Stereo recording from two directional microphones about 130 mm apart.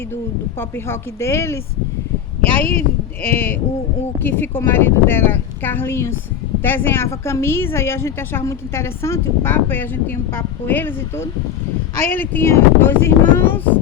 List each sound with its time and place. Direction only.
0.9 s a woman's voice: 20° left (ahead or behind)
2.6 s a woman's voice: 15° left (ahead or behind)